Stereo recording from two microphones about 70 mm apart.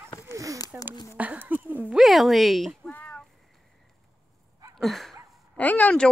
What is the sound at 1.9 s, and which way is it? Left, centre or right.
Speech, centre.